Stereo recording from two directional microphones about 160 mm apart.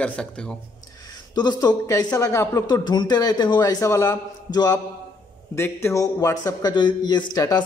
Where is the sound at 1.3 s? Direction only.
25° left (ahead or behind).